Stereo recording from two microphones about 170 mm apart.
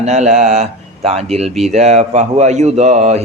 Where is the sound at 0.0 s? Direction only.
45° right (ahead or behind).